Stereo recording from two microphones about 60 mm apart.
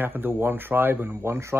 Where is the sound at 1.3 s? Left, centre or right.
Right.